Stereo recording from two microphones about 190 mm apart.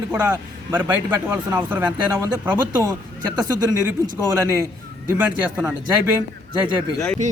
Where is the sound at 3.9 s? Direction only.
15° right (ahead or behind).